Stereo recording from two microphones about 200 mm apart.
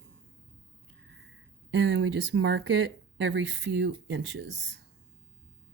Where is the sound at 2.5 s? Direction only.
55° right (ahead or behind).